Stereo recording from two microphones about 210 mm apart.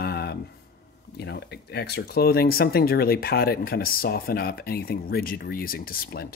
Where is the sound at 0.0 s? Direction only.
50° left (ahead or behind).